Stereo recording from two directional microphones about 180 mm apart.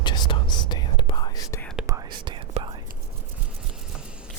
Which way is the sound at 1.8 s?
20° right (ahead or behind).